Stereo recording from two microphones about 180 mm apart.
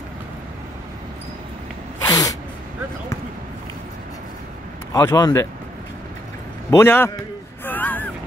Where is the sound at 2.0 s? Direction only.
20° left (ahead or behind).